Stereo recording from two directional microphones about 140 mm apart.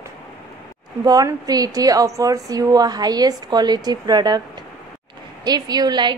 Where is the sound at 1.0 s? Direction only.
25° right (ahead or behind).